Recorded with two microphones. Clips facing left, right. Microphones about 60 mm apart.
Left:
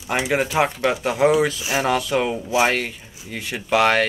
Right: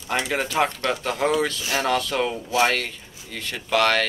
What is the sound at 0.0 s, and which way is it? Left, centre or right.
Speech, centre.